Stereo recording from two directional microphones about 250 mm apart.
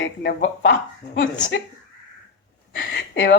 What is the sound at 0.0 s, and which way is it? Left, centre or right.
A woman's voice, left.